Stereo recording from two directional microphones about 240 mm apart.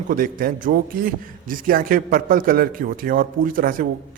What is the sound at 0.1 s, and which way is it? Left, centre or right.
A man's voice, right.